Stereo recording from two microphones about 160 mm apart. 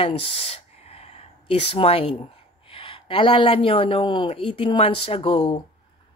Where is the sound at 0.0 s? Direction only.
40° left (ahead or behind).